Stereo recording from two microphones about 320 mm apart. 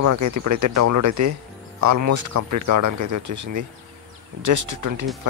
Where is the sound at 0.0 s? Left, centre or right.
Right.